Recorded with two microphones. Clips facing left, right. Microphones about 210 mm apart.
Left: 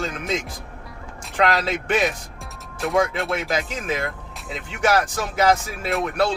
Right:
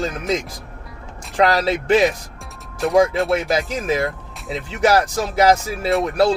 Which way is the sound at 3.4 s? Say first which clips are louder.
Right 5 dB; 35° right (ahead or behind).